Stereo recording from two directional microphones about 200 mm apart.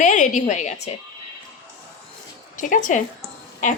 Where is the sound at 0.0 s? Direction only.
40° left (ahead or behind).